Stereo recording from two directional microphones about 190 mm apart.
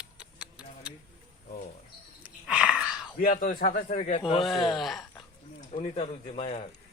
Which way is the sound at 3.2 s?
50° left (ahead or behind).